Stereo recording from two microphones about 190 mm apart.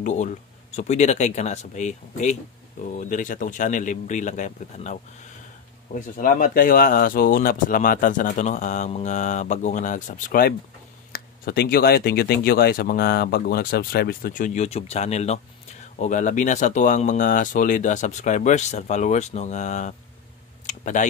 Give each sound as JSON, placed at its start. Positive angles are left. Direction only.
{"t": 0.0, "sound": "speech", "side_deg": 40}
{"t": 5.9, "sound": "speech", "side_deg": 45}
{"t": 20.6, "sound": "a sound", "side_deg": 40}